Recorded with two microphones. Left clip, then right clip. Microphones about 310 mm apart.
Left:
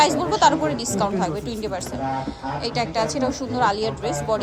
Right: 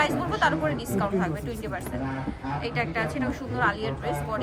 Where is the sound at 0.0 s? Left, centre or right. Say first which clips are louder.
Left 7 dB; centre.